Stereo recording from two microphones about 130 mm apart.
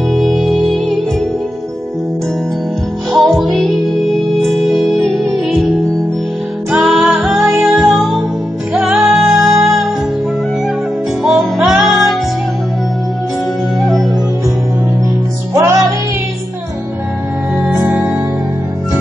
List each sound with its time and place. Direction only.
0.1 s music: centre (ahead or behind)
3.1 s music: centre (ahead or behind)
6.7 s music: 5° right (ahead or behind)
11.2 s music: centre (ahead or behind)
13.7 s music: centre (ahead or behind)
15.5 s music: 25° right (ahead or behind)
17.7 s music: 15° right (ahead or behind)